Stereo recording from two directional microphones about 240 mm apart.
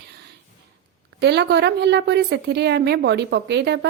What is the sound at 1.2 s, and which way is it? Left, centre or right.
Speech, right.